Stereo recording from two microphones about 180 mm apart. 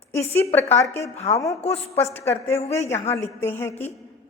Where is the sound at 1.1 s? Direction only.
35° left (ahead or behind).